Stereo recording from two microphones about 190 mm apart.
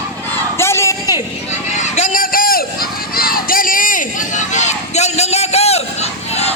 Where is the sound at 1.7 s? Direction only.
35° left (ahead or behind).